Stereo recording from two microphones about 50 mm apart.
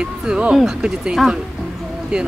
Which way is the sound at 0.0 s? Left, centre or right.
Centre.